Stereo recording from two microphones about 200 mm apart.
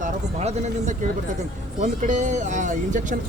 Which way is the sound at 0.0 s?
35° right (ahead or behind).